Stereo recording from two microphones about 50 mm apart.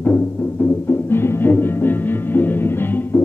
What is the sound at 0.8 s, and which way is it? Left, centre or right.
Music, left.